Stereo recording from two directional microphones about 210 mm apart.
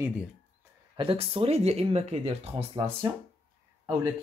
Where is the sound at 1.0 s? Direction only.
25° right (ahead or behind).